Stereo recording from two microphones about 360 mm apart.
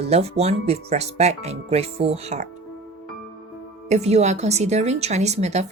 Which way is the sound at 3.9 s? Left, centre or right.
Centre.